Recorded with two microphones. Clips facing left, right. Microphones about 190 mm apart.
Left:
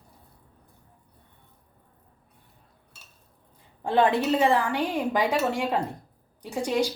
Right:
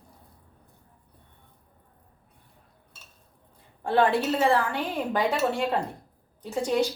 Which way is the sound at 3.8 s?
20° left (ahead or behind).